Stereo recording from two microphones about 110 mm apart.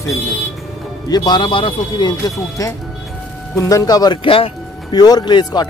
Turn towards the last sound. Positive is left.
turn(degrees=40)  # may be behind; listen again after turning